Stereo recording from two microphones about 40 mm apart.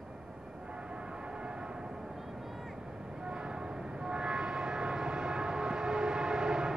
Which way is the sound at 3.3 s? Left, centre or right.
Right.